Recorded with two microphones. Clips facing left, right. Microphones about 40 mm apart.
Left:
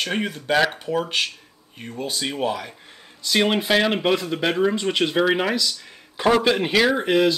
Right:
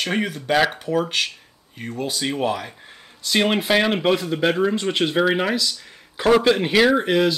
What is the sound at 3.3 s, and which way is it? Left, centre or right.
A man's voice, centre.